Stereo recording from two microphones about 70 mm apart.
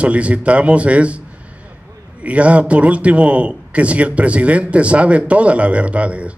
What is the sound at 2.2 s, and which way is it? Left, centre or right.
A man's voice, centre.